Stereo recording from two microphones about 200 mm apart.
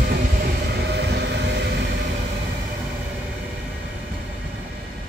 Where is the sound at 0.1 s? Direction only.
50° right (ahead or behind).